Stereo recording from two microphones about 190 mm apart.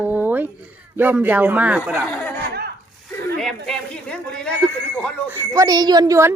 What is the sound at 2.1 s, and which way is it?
Speech, 5° left (ahead or behind).